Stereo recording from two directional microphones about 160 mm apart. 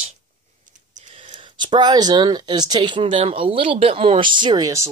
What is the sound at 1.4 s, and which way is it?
Speech, 30° right (ahead or behind).